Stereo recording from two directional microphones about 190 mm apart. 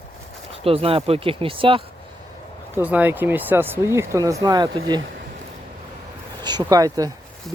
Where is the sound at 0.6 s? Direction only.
30° right (ahead or behind).